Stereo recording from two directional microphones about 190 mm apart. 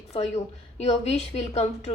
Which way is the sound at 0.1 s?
35° left (ahead or behind).